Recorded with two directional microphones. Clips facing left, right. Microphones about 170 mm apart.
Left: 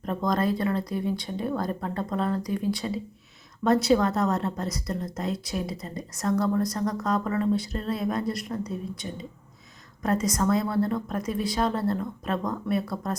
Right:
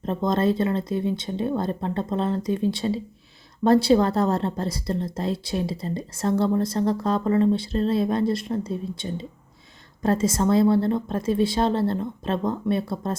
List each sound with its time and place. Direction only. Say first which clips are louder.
0.0 s a woman's voice: right 3 dB; 25° right (ahead or behind)